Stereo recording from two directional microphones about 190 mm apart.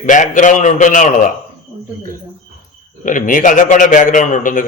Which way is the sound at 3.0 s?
45° left (ahead or behind).